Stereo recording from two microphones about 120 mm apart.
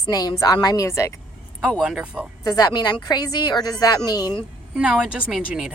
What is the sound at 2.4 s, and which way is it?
A woman's voice, 35° left (ahead or behind).